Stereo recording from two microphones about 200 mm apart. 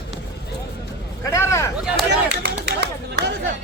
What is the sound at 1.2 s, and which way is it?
Vehicle, 15° left (ahead or behind).